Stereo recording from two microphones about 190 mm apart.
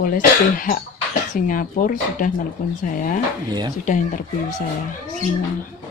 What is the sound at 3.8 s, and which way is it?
Speech, 45° left (ahead or behind).